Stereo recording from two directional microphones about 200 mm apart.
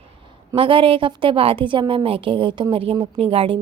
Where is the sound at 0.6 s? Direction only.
25° right (ahead or behind).